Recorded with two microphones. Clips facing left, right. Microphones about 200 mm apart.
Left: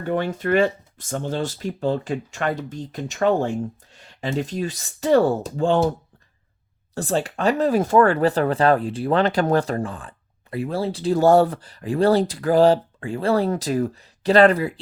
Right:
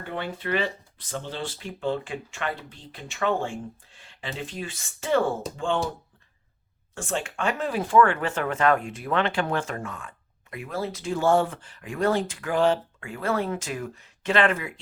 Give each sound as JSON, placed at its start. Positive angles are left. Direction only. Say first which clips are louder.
{"t": 0.0, "sound": "speech", "louder": "left 9 dB", "side_deg": 45}
{"t": 6.9, "sound": "speech", "louder": "left 7 dB", "side_deg": 35}